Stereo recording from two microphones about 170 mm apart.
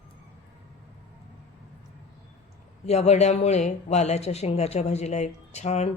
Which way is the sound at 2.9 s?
40° left (ahead or behind).